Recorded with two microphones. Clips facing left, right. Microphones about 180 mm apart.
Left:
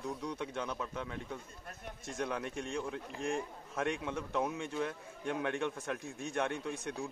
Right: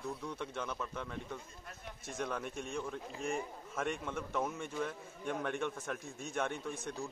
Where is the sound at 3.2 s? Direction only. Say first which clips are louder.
Left 2 dB; 5° right (ahead or behind).